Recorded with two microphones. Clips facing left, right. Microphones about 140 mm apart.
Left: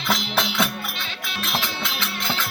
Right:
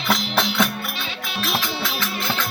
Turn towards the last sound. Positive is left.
turn(degrees=0)  # may be behind; listen again after turning